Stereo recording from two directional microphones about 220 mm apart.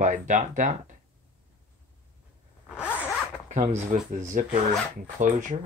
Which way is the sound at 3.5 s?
35° right (ahead or behind).